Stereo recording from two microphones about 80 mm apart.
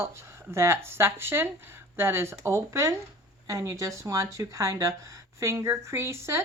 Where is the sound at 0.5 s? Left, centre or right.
Right.